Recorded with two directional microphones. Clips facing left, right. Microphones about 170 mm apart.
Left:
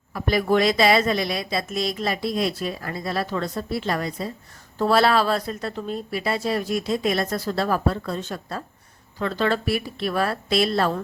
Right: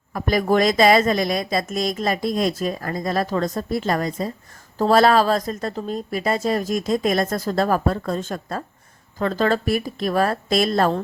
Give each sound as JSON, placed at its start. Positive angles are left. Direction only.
{"t": 0.1, "sound": "speech", "side_deg": -45}